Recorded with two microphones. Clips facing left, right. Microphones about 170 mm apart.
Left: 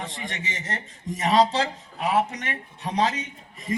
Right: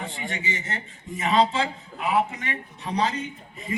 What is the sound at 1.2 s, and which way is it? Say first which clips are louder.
Speech: left 1 dB; 40° left (ahead or behind).